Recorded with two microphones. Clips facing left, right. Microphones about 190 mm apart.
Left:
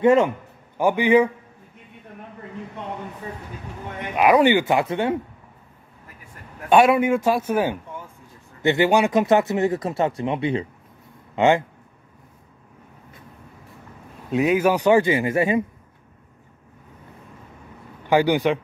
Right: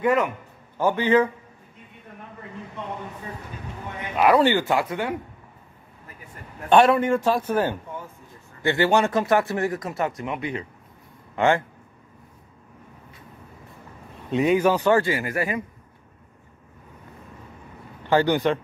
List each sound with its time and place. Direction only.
0.0 s speech: 25° left (ahead or behind)
0.7 s speech: 15° left (ahead or behind)
4.2 s speech: 15° left (ahead or behind)
6.7 s speech: 10° left (ahead or behind)
14.3 s speech: 5° left (ahead or behind); by 15.6 s 25° left (ahead or behind)
18.0 s speech: 10° left (ahead or behind)